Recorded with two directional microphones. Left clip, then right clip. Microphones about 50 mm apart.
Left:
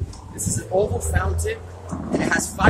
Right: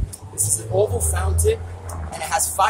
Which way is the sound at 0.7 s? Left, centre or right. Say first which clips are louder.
Right 1 dB; centre.